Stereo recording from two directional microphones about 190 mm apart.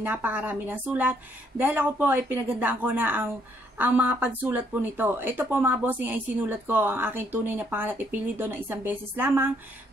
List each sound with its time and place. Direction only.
0.0 s speech: 10° right (ahead or behind)